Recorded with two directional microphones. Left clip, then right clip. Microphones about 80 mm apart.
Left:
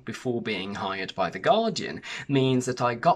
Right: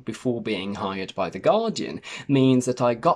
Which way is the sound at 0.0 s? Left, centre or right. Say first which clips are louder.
Right 3 dB; right.